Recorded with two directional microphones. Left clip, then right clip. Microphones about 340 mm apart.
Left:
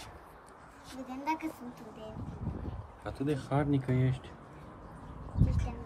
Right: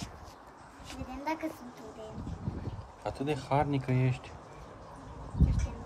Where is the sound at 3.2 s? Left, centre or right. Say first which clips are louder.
Right 2 dB; right.